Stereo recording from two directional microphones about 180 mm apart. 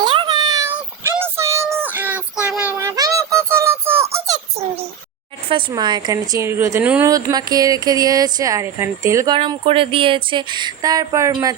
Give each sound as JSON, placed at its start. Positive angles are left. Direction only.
{"t": 0.0, "sound": "a sound", "side_deg": -25}
{"t": 1.1, "sound": "child singing", "side_deg": -15}
{"t": 5.5, "sound": "speech", "side_deg": -25}